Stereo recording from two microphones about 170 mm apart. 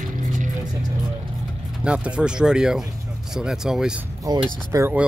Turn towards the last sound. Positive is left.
turn(degrees=-10)  # may be behind; listen again after turning